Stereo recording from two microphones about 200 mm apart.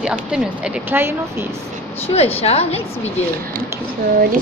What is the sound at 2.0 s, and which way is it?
Speech, 30° left (ahead or behind).